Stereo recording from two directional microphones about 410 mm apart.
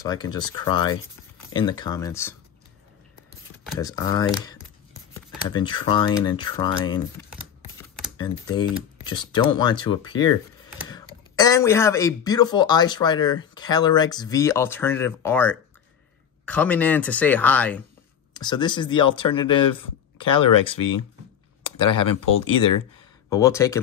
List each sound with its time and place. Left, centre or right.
0.0 s speech: centre
3.5 s speech: centre
7.2 s typing: centre
7.7 s speech: centre
20.2 s speech: left
22.1 s speech: left
23.3 s speech: centre